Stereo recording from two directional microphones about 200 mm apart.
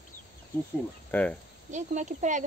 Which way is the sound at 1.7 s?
35° right (ahead or behind).